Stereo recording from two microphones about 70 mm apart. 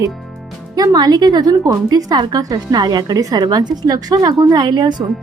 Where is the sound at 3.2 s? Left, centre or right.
Right.